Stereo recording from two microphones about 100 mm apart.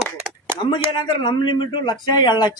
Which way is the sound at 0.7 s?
50° left (ahead or behind).